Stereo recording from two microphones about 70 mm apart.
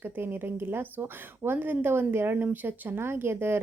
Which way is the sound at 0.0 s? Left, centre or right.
Right.